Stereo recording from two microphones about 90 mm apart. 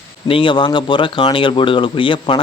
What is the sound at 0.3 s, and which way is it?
Speech, 70° left (ahead or behind).